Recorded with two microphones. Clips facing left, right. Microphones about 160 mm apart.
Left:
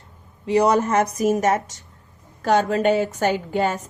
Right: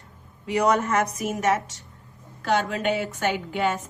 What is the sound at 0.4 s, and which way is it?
A woman's voice, 35° left (ahead or behind).